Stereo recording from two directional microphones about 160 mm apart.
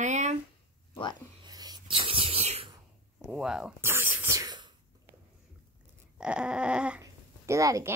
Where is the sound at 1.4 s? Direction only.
25° right (ahead or behind).